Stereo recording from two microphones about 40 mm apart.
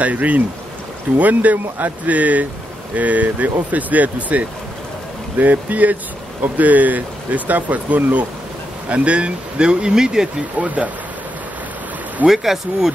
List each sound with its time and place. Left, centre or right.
0.0 s speech: right; by 10.3 s centre
12.3 s speech: centre